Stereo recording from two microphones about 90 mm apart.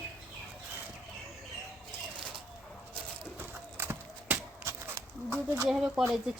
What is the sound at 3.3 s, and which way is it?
Horse, 25° right (ahead or behind).